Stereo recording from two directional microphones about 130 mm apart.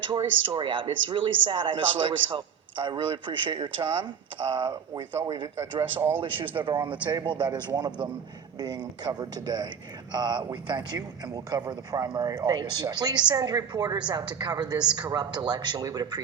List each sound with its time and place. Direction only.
0.2 s speech: 40° right (ahead or behind)